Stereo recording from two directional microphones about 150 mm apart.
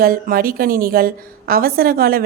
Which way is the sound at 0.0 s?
75° right (ahead or behind).